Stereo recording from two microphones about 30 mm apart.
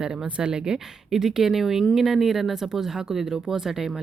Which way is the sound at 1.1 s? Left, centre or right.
Centre.